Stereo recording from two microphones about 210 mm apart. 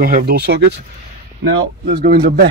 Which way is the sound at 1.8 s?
50° right (ahead or behind).